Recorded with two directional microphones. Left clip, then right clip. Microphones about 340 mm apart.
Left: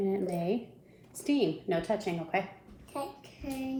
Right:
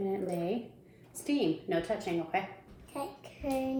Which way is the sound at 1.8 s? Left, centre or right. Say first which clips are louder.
Left 1 dB; centre.